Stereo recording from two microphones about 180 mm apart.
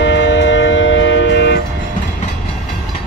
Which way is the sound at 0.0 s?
85° left.